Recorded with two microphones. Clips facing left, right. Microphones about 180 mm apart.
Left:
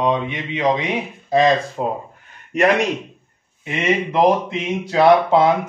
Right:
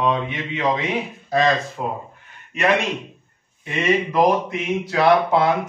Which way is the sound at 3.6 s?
25° left (ahead or behind).